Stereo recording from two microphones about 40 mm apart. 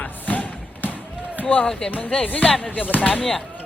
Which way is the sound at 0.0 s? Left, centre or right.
Left.